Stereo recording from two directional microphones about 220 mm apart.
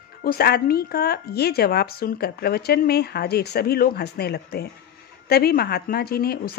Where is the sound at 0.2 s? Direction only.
45° left (ahead or behind).